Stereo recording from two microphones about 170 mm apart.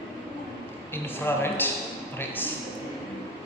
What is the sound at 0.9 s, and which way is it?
A man's voice, 10° left (ahead or behind).